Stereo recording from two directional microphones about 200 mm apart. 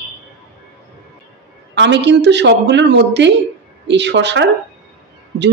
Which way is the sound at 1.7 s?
60° right (ahead or behind).